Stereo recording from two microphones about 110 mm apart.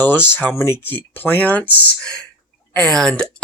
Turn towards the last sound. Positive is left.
turn(degrees=5)  # may be behind; listen again after turning